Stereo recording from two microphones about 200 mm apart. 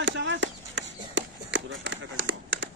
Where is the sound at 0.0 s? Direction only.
65° right (ahead or behind).